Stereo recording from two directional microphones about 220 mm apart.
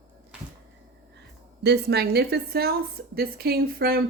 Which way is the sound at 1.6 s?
50° right (ahead or behind).